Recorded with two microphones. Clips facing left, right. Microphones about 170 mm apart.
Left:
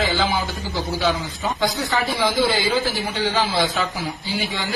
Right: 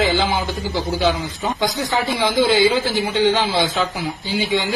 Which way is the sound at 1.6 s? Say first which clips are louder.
Right 1 dB; 20° right (ahead or behind).